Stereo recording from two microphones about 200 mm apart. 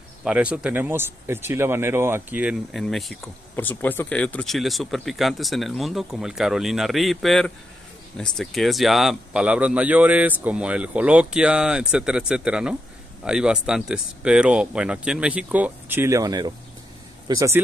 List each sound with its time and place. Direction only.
0.2 s a man's voice: 5° right (ahead or behind)